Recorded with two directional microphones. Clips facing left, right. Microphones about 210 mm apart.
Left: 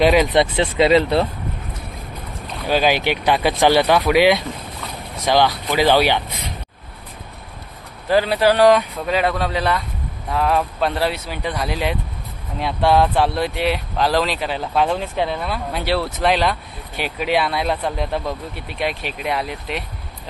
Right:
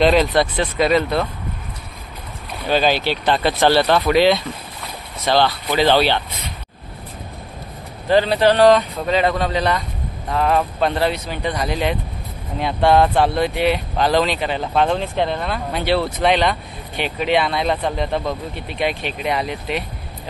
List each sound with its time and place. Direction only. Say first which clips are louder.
0.0 s speech: even; 10° left (ahead or behind)
0.3 s speech: left 1 dB; 25° left (ahead or behind)
2.6 s speech: even; 10° left (ahead or behind)
8.1 s speech: right 1 dB; 5° left (ahead or behind)